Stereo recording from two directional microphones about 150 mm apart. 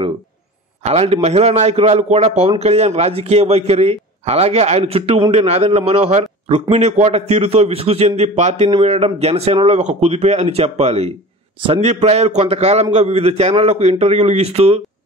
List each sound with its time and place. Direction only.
0.8 s a man's voice: 45° right (ahead or behind)